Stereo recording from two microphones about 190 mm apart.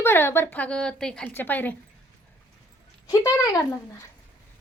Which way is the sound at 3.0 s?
15° left (ahead or behind).